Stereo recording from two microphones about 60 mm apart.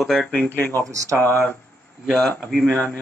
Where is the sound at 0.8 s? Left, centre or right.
Right.